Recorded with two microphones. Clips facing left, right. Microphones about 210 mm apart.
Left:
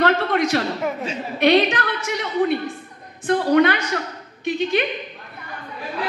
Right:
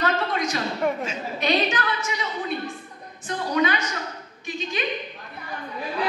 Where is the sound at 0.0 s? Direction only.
65° left (ahead or behind).